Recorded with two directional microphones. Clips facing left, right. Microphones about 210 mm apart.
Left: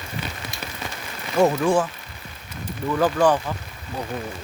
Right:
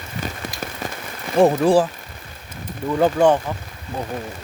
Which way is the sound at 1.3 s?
35° right (ahead or behind).